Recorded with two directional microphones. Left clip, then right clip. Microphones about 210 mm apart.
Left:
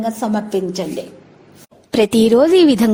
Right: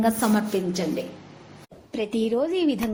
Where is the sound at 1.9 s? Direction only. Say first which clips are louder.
Left 13 dB; 60° left (ahead or behind).